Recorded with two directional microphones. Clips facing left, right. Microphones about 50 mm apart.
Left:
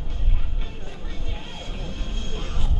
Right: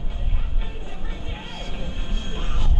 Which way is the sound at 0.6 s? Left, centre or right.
Centre.